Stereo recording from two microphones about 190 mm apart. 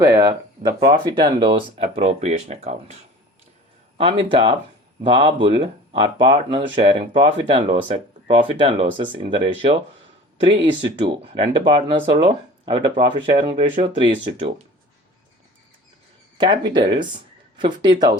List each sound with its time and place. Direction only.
0.0 s speech: 15° right (ahead or behind)
16.4 s speech: 25° right (ahead or behind)